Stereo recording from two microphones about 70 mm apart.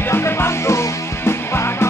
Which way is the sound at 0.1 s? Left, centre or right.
Left.